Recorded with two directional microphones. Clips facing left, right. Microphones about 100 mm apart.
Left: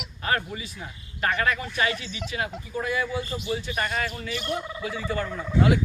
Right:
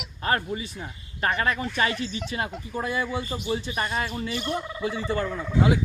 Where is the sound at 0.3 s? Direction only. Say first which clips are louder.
Right 2 dB; 30° right (ahead or behind).